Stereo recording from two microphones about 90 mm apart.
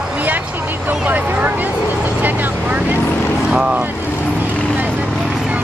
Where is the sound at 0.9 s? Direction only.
20° right (ahead or behind).